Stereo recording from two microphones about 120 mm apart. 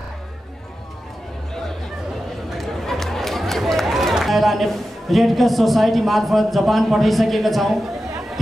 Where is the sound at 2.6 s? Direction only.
Centre (ahead or behind).